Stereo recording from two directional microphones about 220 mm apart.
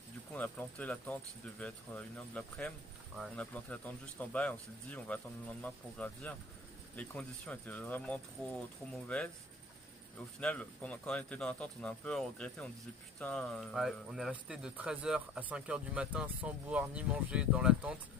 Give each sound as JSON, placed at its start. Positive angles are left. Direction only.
{"t": 0.3, "sound": "speech", "side_deg": 5}